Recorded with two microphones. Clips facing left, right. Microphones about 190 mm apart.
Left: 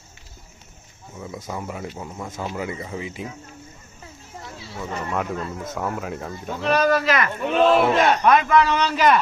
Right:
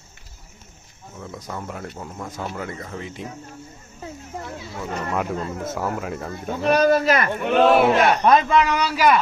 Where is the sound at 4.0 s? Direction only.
60° right (ahead or behind).